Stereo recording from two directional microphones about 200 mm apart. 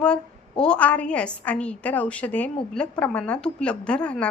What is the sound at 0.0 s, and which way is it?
A woman's voice, 5° left (ahead or behind).